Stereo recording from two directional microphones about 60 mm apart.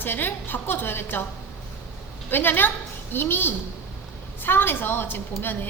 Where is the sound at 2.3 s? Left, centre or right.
Left.